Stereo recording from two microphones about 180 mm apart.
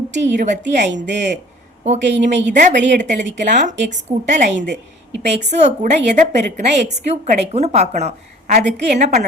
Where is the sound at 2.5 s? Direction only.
45° right (ahead or behind).